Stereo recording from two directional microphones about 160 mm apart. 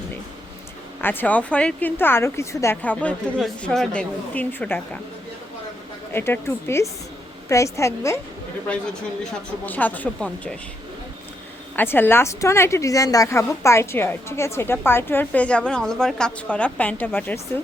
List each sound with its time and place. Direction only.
1.0 s a woman's voice: 10° left (ahead or behind)
6.1 s a woman's voice: 15° left (ahead or behind)
9.6 s a woman's voice: 10° left (ahead or behind)
11.8 s a woman's voice: 15° left (ahead or behind)